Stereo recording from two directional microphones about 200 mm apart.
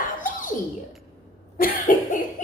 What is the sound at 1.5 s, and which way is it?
Cough, 40° left (ahead or behind).